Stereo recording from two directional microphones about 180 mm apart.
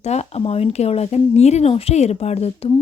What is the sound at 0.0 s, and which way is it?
Speech, 35° left (ahead or behind).